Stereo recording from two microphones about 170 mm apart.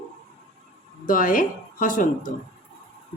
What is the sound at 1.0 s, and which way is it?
A woman's voice, 50° left (ahead or behind).